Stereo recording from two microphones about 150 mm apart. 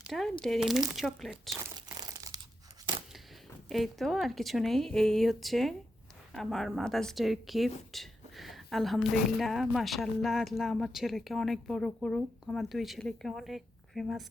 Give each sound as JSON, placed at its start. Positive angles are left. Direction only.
{"t": 0.0, "sound": "crumpling", "side_deg": 0}
{"t": 0.4, "sound": "speech", "side_deg": 0}
{"t": 2.0, "sound": "crumpling", "side_deg": -25}
{"t": 3.7, "sound": "speech", "side_deg": 0}